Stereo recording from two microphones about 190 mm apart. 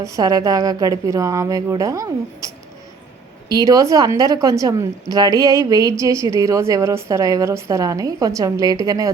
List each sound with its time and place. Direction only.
0.0 s a woman's voice: 20° right (ahead or behind)
3.5 s a woman's voice: 20° right (ahead or behind)